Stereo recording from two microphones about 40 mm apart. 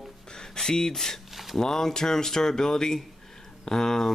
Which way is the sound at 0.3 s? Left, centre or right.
Centre.